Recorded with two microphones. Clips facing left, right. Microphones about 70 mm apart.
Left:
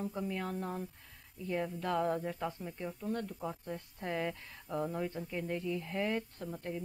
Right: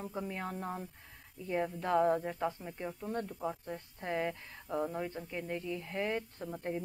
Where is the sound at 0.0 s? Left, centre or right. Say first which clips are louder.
Left 2 dB; centre.